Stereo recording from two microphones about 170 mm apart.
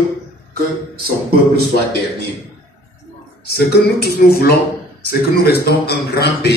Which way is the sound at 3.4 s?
70° left (ahead or behind).